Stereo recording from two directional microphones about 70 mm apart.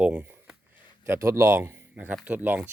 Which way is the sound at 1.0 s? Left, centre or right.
Right.